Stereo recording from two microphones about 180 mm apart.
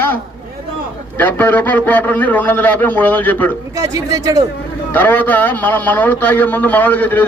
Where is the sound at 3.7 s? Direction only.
20° right (ahead or behind).